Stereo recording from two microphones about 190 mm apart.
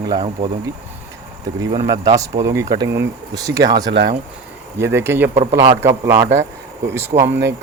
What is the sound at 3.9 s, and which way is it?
Speech, 70° right (ahead or behind).